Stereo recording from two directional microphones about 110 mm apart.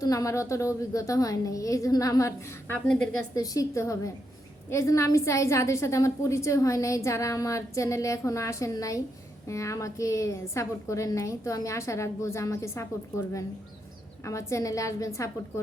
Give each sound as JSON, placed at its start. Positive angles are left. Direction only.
{"t": 0.0, "sound": "a woman's voice", "side_deg": 35}
{"t": 2.8, "sound": "a woman's voice", "side_deg": 5}
{"t": 3.3, "sound": "a woman's voice", "side_deg": 35}